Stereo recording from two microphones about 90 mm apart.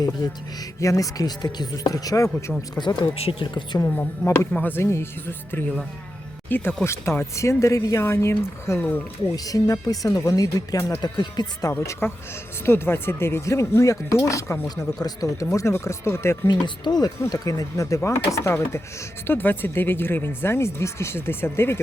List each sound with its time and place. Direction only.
0.8 s speech: 40° left (ahead or behind)
2.7 s speech: 55° left (ahead or behind)
3.8 s speech: 25° left (ahead or behind)
6.8 s speech: 30° left (ahead or behind)
9.3 s speech: 40° left (ahead or behind)
11.0 s speech: 55° left (ahead or behind)
11.7 s speech: 25° left (ahead or behind)
15.0 s speech: 40° left (ahead or behind)
16.5 s speech: 55° left (ahead or behind); by 21.8 s 25° left (ahead or behind)